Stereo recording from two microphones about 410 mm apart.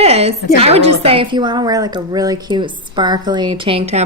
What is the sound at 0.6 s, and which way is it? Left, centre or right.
A woman's voice, centre.